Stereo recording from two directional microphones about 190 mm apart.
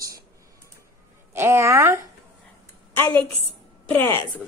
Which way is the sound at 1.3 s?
15° right (ahead or behind).